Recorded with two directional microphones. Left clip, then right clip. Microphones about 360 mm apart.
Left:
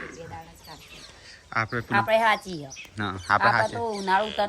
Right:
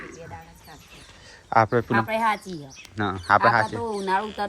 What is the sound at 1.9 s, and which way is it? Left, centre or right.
Speech, centre.